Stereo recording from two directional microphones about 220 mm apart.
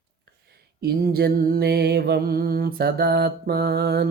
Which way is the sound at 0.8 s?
45° right (ahead or behind).